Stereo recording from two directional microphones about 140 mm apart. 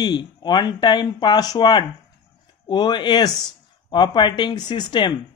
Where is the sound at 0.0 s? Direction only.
30° left (ahead or behind).